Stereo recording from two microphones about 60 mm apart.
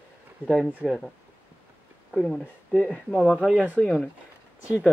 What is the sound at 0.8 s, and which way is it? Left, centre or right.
Speech, centre.